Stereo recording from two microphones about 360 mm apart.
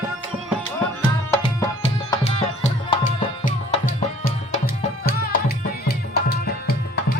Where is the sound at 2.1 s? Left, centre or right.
Centre.